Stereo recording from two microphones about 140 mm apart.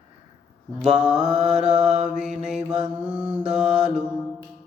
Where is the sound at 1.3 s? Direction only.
55° right (ahead or behind).